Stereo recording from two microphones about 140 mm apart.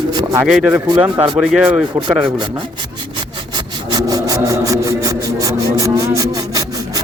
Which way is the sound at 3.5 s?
30° right (ahead or behind).